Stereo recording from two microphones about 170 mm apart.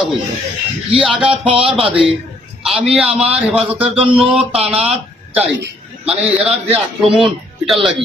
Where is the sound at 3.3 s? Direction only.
5° right (ahead or behind).